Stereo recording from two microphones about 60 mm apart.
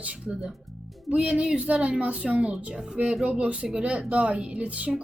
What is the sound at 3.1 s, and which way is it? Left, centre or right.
A woman's voice, centre.